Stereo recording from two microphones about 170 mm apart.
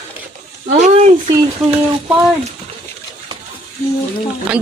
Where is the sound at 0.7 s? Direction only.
45° right (ahead or behind).